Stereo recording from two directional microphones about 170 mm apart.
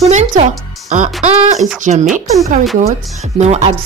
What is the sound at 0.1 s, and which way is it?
Speech, 45° right (ahead or behind).